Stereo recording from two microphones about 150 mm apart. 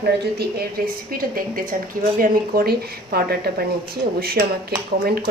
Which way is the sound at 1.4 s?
70° right (ahead or behind).